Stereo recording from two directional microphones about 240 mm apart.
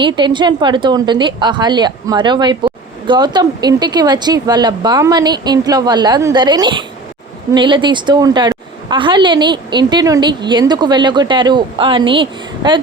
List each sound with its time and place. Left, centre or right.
0.0 s a woman's voice: centre